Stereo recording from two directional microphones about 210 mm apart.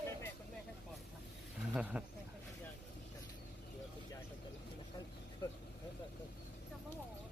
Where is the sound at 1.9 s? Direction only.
5° right (ahead or behind).